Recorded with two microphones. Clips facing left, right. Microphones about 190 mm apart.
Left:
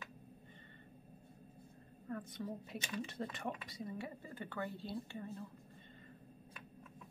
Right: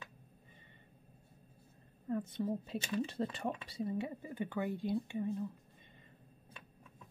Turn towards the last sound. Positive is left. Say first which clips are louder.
# right 8 dB
turn(degrees=-15)  # may be behind; listen again after turning